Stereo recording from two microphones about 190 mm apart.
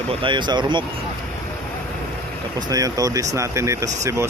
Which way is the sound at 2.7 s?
20° right (ahead or behind).